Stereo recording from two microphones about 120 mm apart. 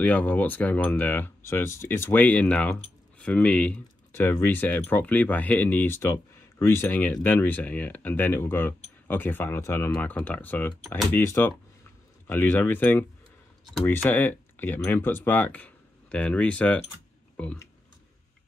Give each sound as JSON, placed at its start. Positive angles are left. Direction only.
{"t": 0.0, "sound": "speech", "side_deg": 10}
{"t": 4.1, "sound": "speech", "side_deg": 20}
{"t": 9.9, "sound": "speech", "side_deg": 10}
{"t": 14.0, "sound": "speech", "side_deg": 15}